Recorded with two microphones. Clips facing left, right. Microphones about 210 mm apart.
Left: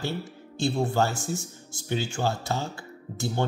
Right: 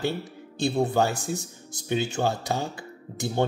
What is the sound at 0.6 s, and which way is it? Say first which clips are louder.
Speech: right 2 dB; 20° right (ahead or behind).